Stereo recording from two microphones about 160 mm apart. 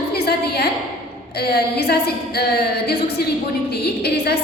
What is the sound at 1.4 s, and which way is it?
A woman's voice, 80° left.